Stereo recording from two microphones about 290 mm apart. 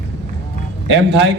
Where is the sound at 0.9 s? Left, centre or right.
Right.